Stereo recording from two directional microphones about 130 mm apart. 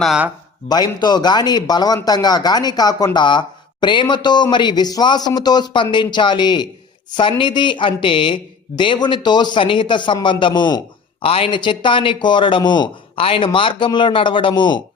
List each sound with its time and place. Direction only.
0.7 s speech: 35° left (ahead or behind)
11.2 s speech: 45° left (ahead or behind)